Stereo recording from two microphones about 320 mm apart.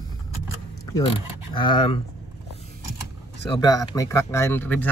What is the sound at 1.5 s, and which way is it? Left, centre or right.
Speech, centre.